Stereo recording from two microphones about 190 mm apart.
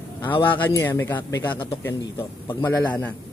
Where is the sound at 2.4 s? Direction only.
10° left (ahead or behind).